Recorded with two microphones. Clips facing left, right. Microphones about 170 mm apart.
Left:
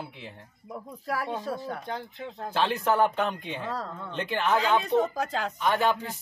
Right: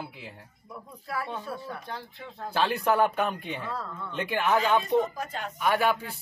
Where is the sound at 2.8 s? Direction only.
10° right (ahead or behind).